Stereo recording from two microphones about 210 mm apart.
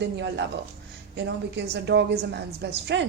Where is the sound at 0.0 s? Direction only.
55° right (ahead or behind).